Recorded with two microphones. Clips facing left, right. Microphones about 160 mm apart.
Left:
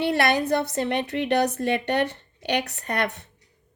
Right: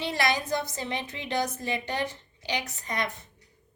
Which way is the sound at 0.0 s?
60° left (ahead or behind).